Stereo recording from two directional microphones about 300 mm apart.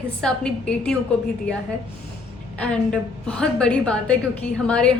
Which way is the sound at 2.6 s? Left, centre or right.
Centre.